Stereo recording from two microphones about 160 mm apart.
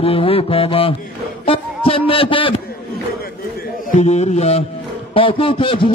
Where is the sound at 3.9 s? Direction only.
45° left (ahead or behind).